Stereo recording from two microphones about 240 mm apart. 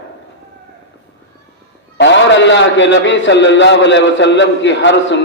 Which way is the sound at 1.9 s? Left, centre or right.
Left.